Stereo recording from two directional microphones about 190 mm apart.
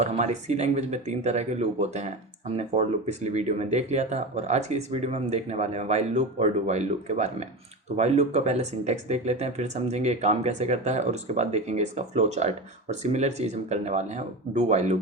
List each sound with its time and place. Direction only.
0.0 s speech: 35° right (ahead or behind)